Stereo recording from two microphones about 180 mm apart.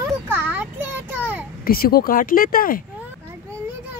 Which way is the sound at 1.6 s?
55° left (ahead or behind).